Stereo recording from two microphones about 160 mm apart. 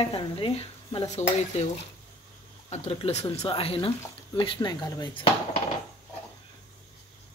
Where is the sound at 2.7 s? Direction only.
40° left (ahead or behind); by 5.1 s 25° left (ahead or behind).